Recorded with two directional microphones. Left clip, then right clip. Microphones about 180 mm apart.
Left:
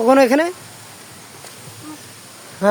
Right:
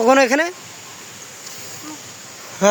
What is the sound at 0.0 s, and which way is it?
Speech, 10° left (ahead or behind).